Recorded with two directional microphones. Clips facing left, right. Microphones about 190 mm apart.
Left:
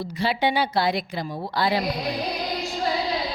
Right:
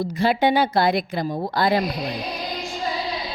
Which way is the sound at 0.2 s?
50° right (ahead or behind).